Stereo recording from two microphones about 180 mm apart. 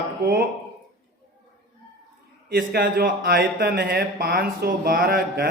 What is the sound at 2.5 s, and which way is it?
A man's voice, 55° right (ahead or behind).